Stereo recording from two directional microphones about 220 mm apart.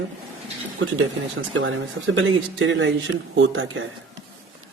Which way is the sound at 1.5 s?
60° right (ahead or behind).